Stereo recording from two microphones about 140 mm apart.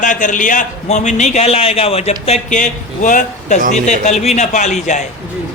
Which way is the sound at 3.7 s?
55° left (ahead or behind).